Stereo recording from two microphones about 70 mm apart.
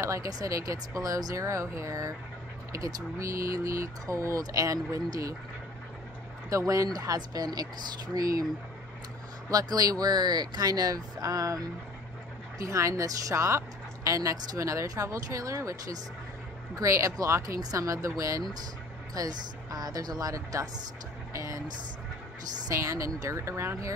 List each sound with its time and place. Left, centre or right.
0.0 s a woman's voice: right
6.5 s speech: right
8.1 s speech: right
9.5 s a woman's voice: right
16.7 s a woman's voice: right
19.1 s speech: right
22.7 s a woman's voice: right